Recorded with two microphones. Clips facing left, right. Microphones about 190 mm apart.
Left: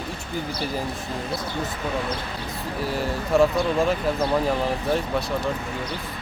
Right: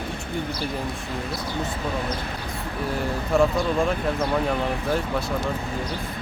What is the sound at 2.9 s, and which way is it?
Speech, centre (ahead or behind).